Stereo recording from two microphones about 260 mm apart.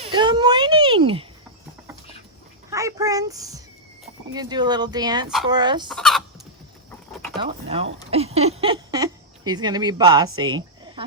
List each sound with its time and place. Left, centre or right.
0.0 s a child's voice: centre
2.6 s a child's voice: centre
5.5 s fowl: centre
5.9 s chicken: centre
7.3 s speech: right
10.4 s a sound: centre